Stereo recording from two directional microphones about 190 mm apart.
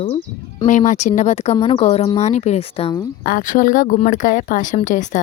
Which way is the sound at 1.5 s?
25° left (ahead or behind).